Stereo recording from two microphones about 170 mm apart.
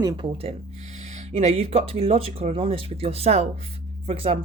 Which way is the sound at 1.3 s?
40° right (ahead or behind).